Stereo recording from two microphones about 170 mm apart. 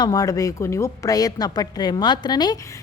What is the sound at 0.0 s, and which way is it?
A woman's voice, 20° left (ahead or behind).